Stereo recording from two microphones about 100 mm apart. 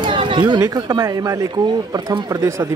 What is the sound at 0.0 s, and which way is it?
Chatter, 55° right (ahead or behind).